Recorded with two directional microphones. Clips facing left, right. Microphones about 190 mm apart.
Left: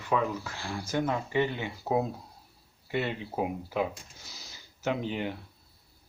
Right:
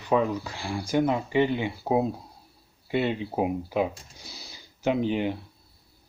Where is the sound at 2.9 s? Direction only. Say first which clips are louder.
Right 5 dB; 20° right (ahead or behind).